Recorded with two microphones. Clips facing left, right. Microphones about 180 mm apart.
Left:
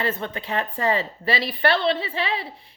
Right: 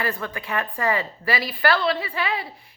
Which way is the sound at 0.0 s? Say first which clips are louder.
Left 1 dB; 25° left (ahead or behind).